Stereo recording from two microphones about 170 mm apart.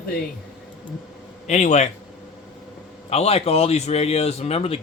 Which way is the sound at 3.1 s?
35° left (ahead or behind).